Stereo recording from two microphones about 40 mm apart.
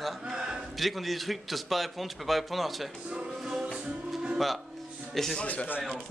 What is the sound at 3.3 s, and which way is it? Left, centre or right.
Music, centre.